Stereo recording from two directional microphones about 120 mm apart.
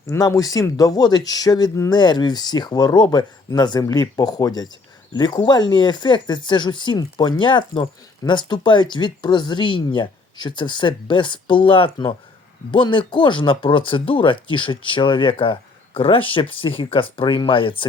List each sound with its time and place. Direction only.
0.1 s speech: 30° left (ahead or behind); by 17.8 s 45° left (ahead or behind)